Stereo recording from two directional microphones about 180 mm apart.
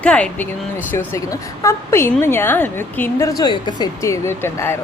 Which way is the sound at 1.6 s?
15° left (ahead or behind).